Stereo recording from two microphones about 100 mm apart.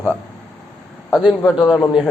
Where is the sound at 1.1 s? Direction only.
5° right (ahead or behind).